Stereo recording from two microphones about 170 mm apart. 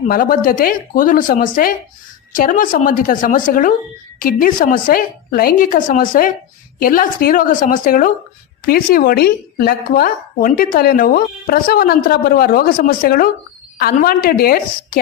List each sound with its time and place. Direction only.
0.1 s a woman's voice: 55° left (ahead or behind)